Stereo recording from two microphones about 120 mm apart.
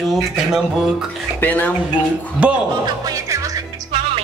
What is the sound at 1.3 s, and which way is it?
Speech, 15° left (ahead or behind).